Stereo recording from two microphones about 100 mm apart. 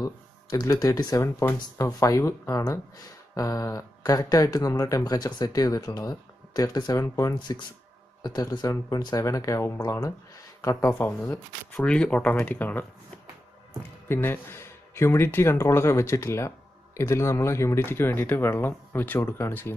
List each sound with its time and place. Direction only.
0.0 s speech: 35° left (ahead or behind)
7.3 s speech: 50° left (ahead or behind); by 11.1 s 25° left (ahead or behind)
11.7 s speech: 10° left (ahead or behind)
14.0 s speech: 20° left (ahead or behind)